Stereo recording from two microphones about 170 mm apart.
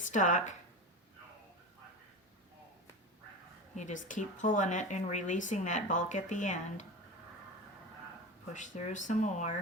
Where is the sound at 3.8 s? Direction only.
45° left (ahead or behind).